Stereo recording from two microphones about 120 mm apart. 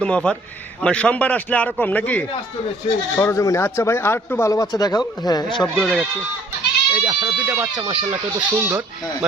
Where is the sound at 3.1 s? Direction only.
25° left (ahead or behind).